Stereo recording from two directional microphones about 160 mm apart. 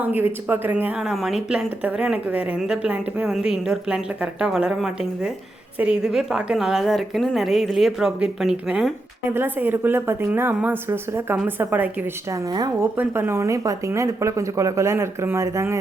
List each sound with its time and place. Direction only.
0.0 s a woman's voice: 10° right (ahead or behind)